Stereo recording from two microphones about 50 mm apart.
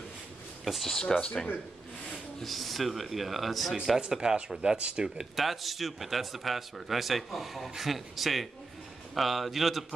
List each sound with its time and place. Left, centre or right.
0.7 s speech: centre
1.1 s speech: centre
2.4 s speech: centre
4.1 s speech: centre
5.3 s speech: centre